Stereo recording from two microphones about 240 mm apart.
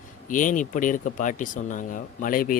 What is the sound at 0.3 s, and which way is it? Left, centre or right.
Speech, left.